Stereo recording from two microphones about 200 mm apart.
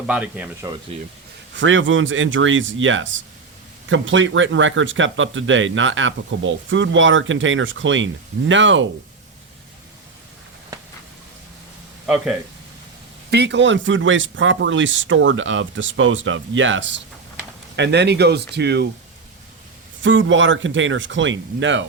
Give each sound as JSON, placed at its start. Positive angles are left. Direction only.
{"t": 0.1, "sound": "speech", "side_deg": -5}
{"t": 1.5, "sound": "speech", "side_deg": -70}
{"t": 12.0, "sound": "speech", "side_deg": -5}
{"t": 13.3, "sound": "speech", "side_deg": -60}
{"t": 17.7, "sound": "speech", "side_deg": -60}
{"t": 20.0, "sound": "speech", "side_deg": -70}